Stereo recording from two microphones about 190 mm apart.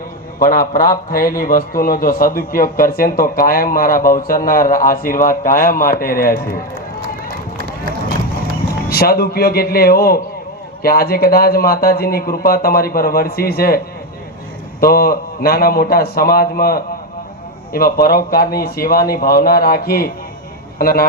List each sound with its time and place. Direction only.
0.3 s a man's voice: 50° left (ahead or behind)
8.9 s a man's voice: 55° left (ahead or behind)